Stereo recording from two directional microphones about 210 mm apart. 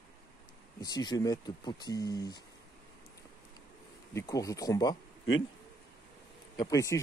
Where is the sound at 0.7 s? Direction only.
20° left (ahead or behind).